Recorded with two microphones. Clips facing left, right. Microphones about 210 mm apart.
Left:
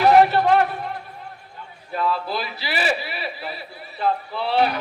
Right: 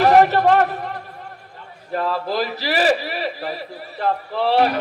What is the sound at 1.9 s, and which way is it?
A man's voice, 45° right (ahead or behind).